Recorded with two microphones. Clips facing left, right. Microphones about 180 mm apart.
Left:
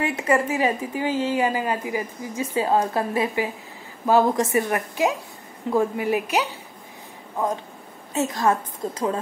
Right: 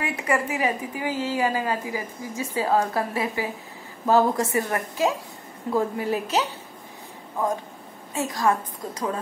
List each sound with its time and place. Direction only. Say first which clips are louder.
0.0 s a woman's voice: left 4 dB; 25° left (ahead or behind)
8.1 s a woman's voice: left 2 dB; 25° left (ahead or behind)